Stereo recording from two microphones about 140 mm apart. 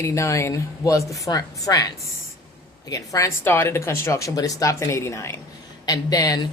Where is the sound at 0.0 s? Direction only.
20° left (ahead or behind).